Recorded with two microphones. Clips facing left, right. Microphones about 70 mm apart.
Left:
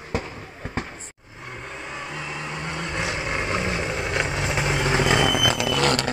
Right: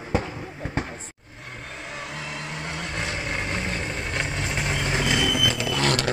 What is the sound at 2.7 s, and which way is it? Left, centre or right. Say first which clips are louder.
Vehicle: left 3 dB; centre.